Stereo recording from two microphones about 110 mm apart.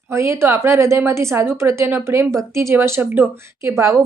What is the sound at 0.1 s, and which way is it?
Speech, 25° right (ahead or behind).